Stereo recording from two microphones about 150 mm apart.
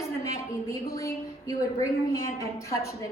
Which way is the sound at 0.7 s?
20° left (ahead or behind).